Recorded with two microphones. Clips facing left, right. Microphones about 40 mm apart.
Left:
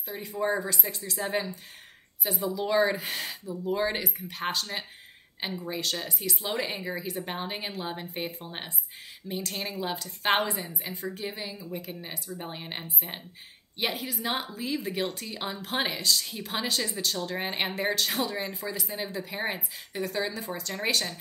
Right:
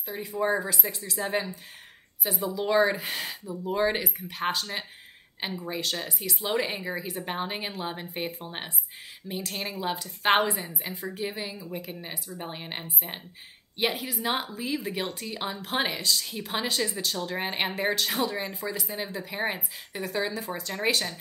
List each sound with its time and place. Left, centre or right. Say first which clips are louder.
0.0 s a woman's voice: right 2 dB; centre